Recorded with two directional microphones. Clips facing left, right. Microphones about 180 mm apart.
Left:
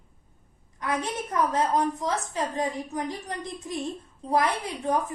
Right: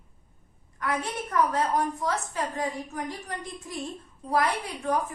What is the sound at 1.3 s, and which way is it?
A woman's voice, 20° left (ahead or behind).